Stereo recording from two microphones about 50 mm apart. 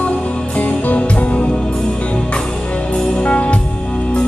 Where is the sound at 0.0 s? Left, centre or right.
Left.